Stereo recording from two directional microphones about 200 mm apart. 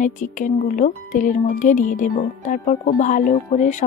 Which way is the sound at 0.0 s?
40° left (ahead or behind).